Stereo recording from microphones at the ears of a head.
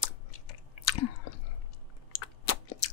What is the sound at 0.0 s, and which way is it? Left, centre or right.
Chewing, left.